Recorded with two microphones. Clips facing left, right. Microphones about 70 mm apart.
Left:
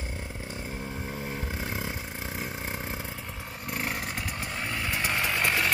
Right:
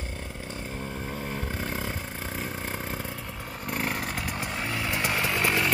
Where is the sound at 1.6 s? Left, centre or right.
Centre.